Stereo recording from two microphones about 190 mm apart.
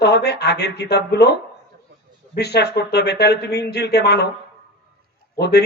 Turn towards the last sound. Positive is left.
turn(degrees=60)  # may be behind; listen again after turning